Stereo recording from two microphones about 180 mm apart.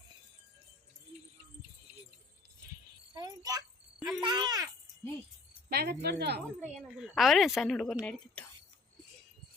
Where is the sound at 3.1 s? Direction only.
20° right (ahead or behind).